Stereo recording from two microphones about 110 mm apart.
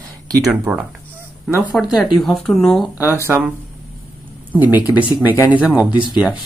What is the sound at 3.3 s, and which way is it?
Speech, 10° right (ahead or behind).